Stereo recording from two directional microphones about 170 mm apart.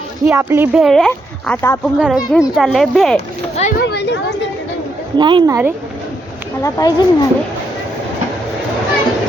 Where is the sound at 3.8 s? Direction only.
70° left (ahead or behind).